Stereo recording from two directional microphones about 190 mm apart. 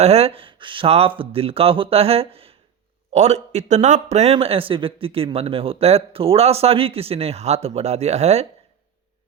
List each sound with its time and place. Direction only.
0.0 s speech: 30° right (ahead or behind)